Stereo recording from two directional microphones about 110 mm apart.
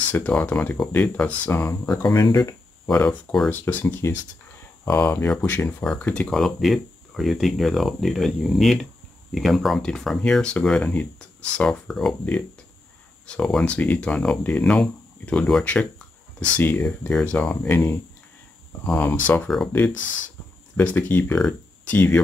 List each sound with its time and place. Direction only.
0.1 s speech: 10° left (ahead or behind)
2.0 s speech: 40° left (ahead or behind)
2.9 s speech: 15° left (ahead or behind)
6.3 s speech: centre (ahead or behind)
13.3 s speech: 5° left (ahead or behind)
20.7 s speech: 15° left (ahead or behind)